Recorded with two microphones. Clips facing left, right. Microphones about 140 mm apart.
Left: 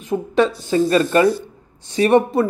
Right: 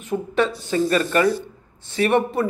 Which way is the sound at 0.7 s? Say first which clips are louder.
Left 4 dB; 25° left (ahead or behind).